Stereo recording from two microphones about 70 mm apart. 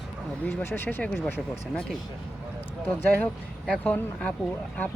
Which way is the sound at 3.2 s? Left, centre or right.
Centre.